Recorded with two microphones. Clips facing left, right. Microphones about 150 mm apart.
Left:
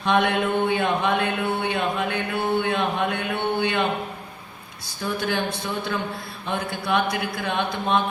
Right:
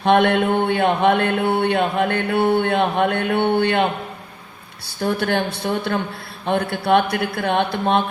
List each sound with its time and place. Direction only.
0.0 s mantra: 60° right (ahead or behind)
4.9 s mantra: 60° right (ahead or behind)